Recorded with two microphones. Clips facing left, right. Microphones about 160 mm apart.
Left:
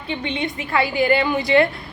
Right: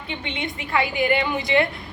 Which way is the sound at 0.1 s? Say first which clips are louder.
Left 5 dB; 20° right (ahead or behind).